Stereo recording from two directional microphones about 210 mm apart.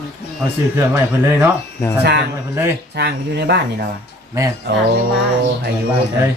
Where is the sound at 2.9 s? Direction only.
50° right (ahead or behind).